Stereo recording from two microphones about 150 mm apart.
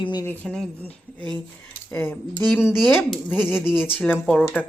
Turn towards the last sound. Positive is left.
turn(degrees=10)  # may be behind; listen again after turning